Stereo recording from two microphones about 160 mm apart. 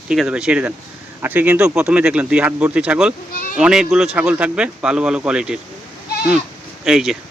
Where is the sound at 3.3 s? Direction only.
60° left (ahead or behind).